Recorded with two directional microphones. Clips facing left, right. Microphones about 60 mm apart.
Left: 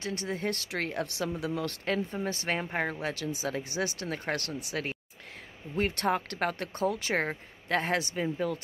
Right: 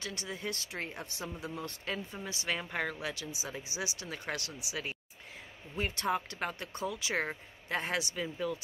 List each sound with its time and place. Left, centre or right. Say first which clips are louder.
0.0 s speech: left 7 dB; left
0.5 s speech: left 6 dB; left
2.2 s speech: left 5 dB; left